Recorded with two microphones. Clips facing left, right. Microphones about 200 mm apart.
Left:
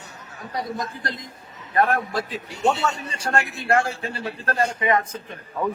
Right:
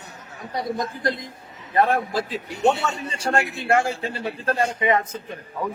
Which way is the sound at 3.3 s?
25° right (ahead or behind).